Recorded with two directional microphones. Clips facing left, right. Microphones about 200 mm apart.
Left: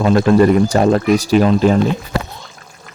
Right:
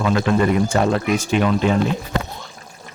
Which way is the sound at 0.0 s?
40° left (ahead or behind).